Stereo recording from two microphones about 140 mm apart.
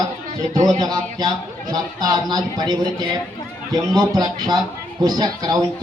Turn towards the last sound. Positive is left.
turn(degrees=-30)  # may be behind; listen again after turning